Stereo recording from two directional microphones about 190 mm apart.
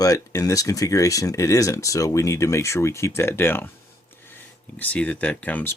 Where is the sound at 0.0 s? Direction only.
20° left (ahead or behind).